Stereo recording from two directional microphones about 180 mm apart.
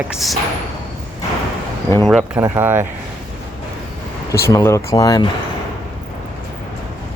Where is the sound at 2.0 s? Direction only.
Centre (ahead or behind).